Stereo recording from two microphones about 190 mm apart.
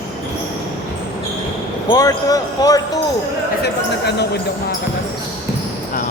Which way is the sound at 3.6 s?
60° left (ahead or behind).